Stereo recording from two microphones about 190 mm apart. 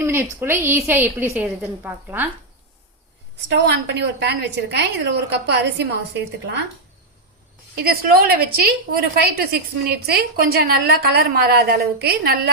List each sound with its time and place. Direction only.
0.0 s a sound: 15° right (ahead or behind)
0.3 s a woman's voice: 10° right (ahead or behind)
3.5 s a woman's voice: 65° right (ahead or behind)
7.8 s a woman's voice: 55° right (ahead or behind)